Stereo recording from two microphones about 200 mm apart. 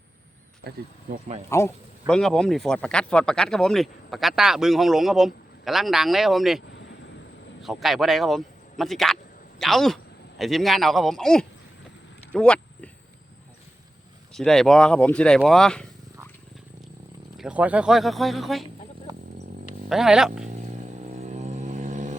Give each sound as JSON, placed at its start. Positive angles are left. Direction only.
{"t": 0.6, "sound": "speech", "side_deg": -55}
{"t": 1.5, "sound": "speech", "side_deg": 15}
{"t": 7.6, "sound": "speech", "side_deg": 0}
{"t": 12.3, "sound": "a sound", "side_deg": 5}
{"t": 14.3, "sound": "speech", "side_deg": 0}
{"t": 17.3, "sound": "speech", "side_deg": -5}
{"t": 18.6, "sound": "a sound", "side_deg": -25}
{"t": 19.9, "sound": "speech", "side_deg": -5}
{"t": 20.5, "sound": "vehicle", "side_deg": -35}